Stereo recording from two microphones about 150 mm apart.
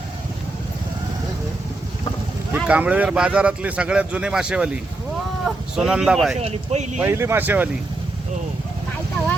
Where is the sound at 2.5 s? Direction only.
10° right (ahead or behind).